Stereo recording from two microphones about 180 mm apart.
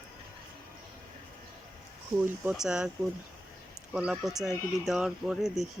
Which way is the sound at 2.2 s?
5° right (ahead or behind).